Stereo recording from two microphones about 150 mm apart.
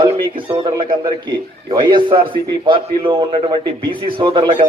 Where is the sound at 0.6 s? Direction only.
30° right (ahead or behind).